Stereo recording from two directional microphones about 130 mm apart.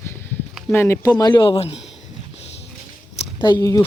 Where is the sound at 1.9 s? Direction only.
55° left (ahead or behind).